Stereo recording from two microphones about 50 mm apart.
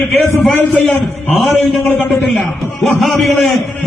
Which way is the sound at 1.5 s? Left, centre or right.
Left.